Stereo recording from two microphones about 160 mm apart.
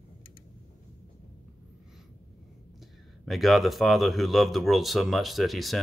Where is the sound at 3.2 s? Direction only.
Centre (ahead or behind).